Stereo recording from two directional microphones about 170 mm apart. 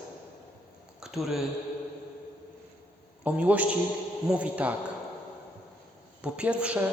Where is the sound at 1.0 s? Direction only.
Centre (ahead or behind).